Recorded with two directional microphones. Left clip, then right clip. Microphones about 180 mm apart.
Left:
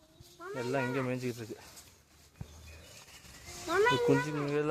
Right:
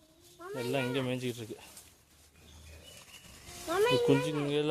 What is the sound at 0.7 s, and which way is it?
Speech, 35° right (ahead or behind).